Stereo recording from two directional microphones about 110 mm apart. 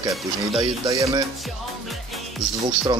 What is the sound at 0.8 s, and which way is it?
Music, 30° right (ahead or behind).